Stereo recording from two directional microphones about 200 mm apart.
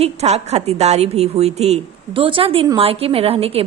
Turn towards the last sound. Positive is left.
turn(degrees=-30)  # may be behind; listen again after turning